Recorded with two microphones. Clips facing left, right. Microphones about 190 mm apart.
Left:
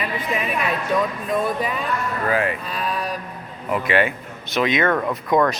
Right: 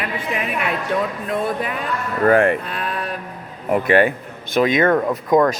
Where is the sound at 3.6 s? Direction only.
45° right (ahead or behind).